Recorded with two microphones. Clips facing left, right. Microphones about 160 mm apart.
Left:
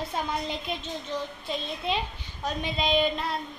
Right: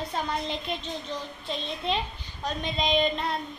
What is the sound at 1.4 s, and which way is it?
Speech, 10° left (ahead or behind).